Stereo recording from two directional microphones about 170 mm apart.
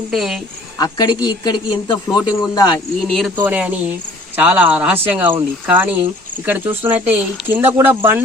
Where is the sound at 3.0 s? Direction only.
Centre (ahead or behind).